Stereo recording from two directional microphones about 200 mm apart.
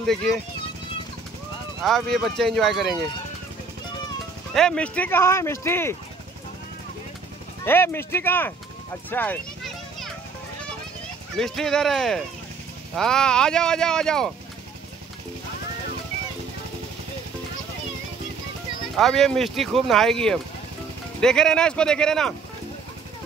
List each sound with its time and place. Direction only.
0.0 s speech: centre (ahead or behind)
1.8 s speech: centre (ahead or behind)
4.6 s speech: 5° left (ahead or behind)
7.6 s speech: 10° left (ahead or behind)
9.1 s children playing: 10° left (ahead or behind)
11.3 s speech: centre (ahead or behind)
18.9 s speech: centre (ahead or behind)